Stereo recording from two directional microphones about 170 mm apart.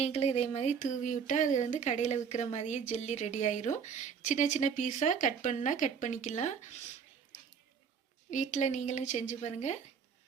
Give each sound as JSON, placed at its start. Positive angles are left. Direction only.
{"t": 0.0, "sound": "speech", "side_deg": 40}
{"t": 8.3, "sound": "speech", "side_deg": 45}